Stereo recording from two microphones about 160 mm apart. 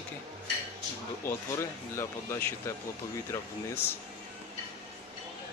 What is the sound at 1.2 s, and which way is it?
Speech, 15° left (ahead or behind).